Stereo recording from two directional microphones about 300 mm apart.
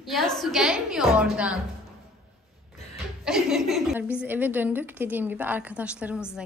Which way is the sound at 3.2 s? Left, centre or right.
Centre.